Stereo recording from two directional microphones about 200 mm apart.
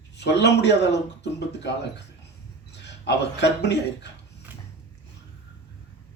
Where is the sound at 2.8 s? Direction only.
60° left (ahead or behind).